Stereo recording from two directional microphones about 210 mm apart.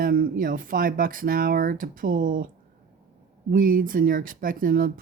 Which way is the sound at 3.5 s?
45° right (ahead or behind).